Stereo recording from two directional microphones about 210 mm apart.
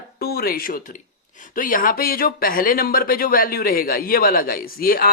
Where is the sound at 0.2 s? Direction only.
45° left (ahead or behind).